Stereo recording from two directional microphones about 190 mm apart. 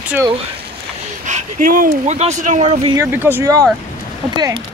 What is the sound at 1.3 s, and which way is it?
Speech, 45° right (ahead or behind).